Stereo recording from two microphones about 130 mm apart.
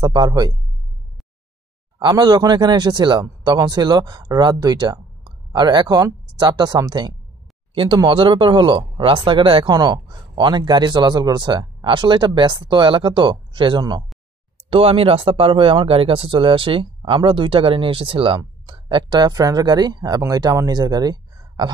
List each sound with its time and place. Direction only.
0.0 s speech: 35° right (ahead or behind)
2.0 s speech: 35° right (ahead or behind)
14.7 s speech: 45° right (ahead or behind)